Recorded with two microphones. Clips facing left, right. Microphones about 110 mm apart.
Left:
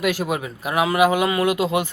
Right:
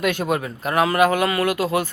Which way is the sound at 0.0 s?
5° left (ahead or behind).